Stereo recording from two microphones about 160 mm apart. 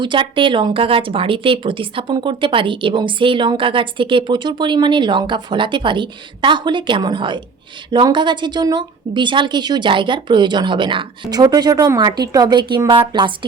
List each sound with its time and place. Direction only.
0.0 s a woman's voice: 30° right (ahead or behind)